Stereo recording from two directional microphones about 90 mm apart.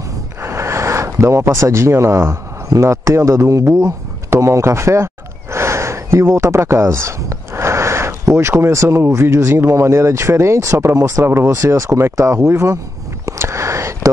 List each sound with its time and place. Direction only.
0.4 s speech: 30° right (ahead or behind)
11.2 s speech: 30° right (ahead or behind)
13.2 s a sound: 35° right (ahead or behind)